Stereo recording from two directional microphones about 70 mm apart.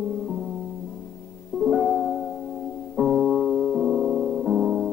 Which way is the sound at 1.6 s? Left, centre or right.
Centre.